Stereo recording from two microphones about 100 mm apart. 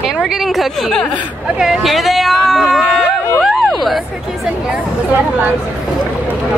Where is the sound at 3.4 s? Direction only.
Centre (ahead or behind).